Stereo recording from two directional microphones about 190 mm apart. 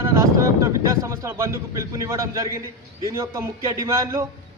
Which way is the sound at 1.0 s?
15° right (ahead or behind).